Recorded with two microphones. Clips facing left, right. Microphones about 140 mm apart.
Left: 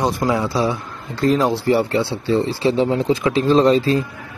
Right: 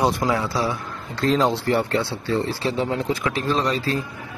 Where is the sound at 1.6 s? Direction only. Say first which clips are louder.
Left 4 dB; 15° left (ahead or behind).